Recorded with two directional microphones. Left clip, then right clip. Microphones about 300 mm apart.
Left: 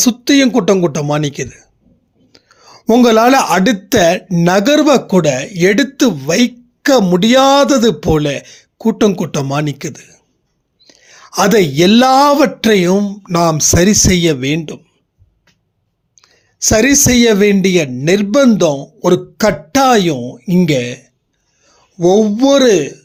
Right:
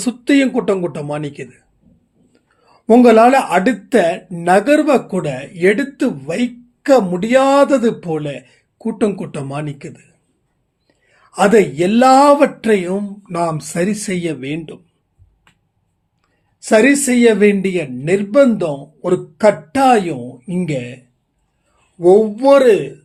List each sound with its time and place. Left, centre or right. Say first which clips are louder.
0.0 s speech: left 4 dB; left
16.2 s speech: left 17 dB; left